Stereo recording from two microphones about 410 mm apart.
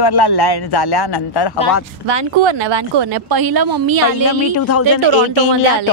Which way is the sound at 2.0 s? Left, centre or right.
Right.